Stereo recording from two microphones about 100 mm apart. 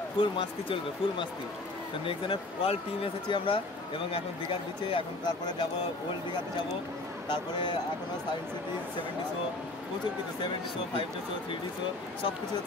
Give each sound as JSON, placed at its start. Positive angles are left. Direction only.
{"t": 0.2, "sound": "speech", "side_deg": 60}
{"t": 7.2, "sound": "speech", "side_deg": 55}